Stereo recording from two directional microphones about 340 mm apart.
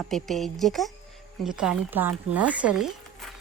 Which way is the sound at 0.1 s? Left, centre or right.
Centre.